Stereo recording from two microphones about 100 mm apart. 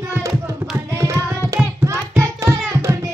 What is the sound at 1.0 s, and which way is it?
Hands, 30° right (ahead or behind).